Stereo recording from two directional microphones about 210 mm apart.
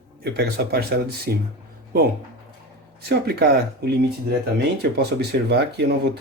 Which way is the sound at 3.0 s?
50° right (ahead or behind).